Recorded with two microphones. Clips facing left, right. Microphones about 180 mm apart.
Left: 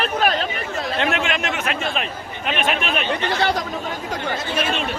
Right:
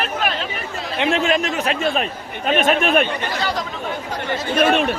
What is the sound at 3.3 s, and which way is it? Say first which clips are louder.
Speech: left 3 dB; 60° left (ahead or behind).